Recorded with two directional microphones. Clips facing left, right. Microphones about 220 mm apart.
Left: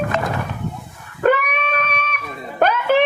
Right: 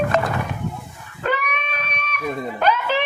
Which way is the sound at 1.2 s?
55° left (ahead or behind).